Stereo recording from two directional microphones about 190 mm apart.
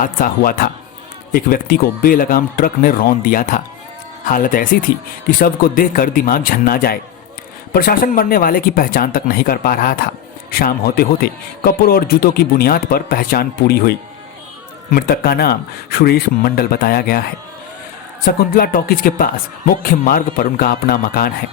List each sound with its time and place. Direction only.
0.0 s a man's voice: 45° left (ahead or behind)
18.3 s a man's voice: 50° left (ahead or behind)